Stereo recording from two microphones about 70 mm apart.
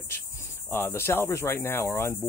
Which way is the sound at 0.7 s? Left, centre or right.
Left.